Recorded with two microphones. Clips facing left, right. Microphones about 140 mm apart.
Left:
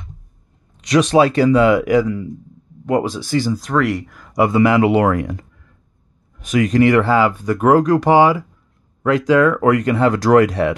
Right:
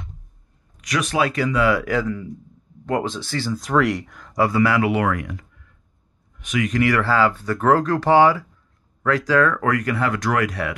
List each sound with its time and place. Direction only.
0.7 s speech: 30° left (ahead or behind)
3.5 s speech: centre (ahead or behind)
4.3 s speech: 20° left (ahead or behind); by 6.8 s 40° left (ahead or behind)
6.8 s speech: 20° left (ahead or behind)